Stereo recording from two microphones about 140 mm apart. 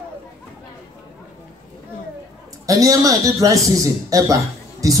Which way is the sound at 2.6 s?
25° right (ahead or behind).